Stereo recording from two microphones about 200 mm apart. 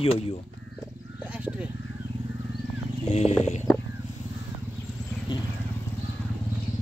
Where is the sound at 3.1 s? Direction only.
35° left (ahead or behind).